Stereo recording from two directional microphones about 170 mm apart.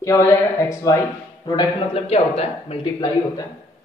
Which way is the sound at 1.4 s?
30° left (ahead or behind).